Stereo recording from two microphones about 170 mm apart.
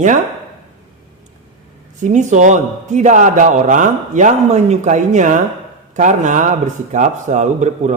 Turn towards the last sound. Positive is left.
turn(degrees=-45)  # may be behind; listen again after turning